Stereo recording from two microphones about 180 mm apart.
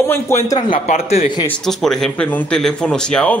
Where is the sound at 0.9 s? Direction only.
35° left (ahead or behind).